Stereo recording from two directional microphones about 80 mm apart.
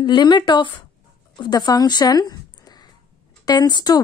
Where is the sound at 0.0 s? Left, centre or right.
Left.